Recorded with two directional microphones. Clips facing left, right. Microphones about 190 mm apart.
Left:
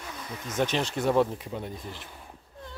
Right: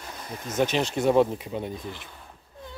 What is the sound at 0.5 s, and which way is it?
Speech, 15° right (ahead or behind).